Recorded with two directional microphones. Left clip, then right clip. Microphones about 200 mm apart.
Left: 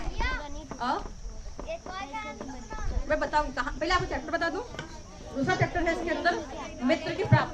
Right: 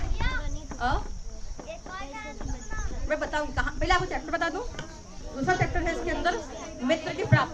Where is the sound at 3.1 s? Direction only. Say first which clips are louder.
Left 2 dB; 5° left (ahead or behind).